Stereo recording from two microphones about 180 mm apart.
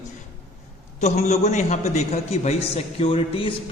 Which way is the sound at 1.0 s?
35° left (ahead or behind).